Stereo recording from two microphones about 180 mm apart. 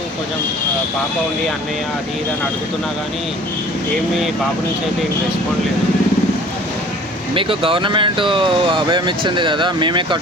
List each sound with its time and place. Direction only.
7.3 s speech: 30° right (ahead or behind)